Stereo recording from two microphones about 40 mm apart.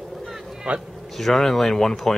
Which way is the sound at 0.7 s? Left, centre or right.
Right.